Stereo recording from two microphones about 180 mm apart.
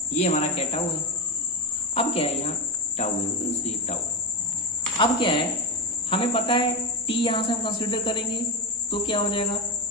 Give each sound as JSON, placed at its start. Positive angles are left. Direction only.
{"t": 0.1, "sound": "speech", "side_deg": 40}
{"t": 2.0, "sound": "speech", "side_deg": 35}
{"t": 4.9, "sound": "a woman's voice", "side_deg": 25}